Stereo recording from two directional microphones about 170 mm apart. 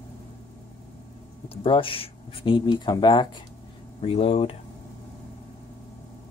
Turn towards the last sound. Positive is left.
turn(degrees=40)  # may be behind; listen again after turning